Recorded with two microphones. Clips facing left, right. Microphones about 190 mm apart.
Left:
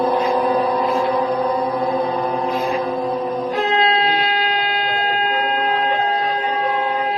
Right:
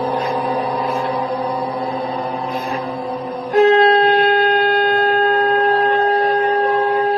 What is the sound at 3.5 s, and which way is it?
Shofar, 50° right (ahead or behind).